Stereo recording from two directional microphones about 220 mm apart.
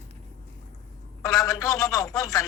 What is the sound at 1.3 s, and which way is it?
A man's voice, 15° left (ahead or behind).